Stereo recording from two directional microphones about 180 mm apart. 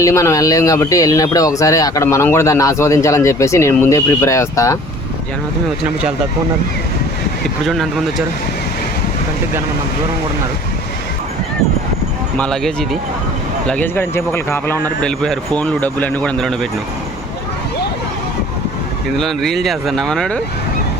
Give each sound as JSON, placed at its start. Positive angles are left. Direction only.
{"t": 0.0, "sound": "speech", "side_deg": 15}
{"t": 7.6, "sound": "speech", "side_deg": 0}
{"t": 12.4, "sound": "speech", "side_deg": 0}
{"t": 19.1, "sound": "speech", "side_deg": 0}